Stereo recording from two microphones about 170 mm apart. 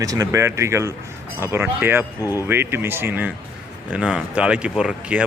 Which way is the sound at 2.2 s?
20° left (ahead or behind).